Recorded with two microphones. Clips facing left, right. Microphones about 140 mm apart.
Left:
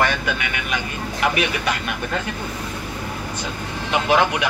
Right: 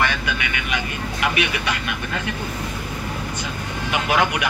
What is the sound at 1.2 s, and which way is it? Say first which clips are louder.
Speech: left 2 dB; 40° left (ahead or behind).